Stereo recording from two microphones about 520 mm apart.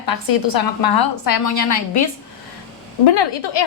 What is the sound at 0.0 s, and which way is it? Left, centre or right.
A woman's voice, left.